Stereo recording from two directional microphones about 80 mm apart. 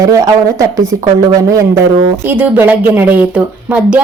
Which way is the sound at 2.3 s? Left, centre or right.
Right.